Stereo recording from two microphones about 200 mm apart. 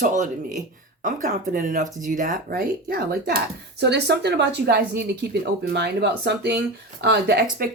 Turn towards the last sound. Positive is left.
turn(degrees=-55)  # may be behind; listen again after turning